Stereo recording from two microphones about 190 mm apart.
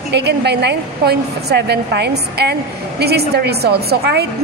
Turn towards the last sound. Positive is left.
turn(degrees=-55)  # may be behind; listen again after turning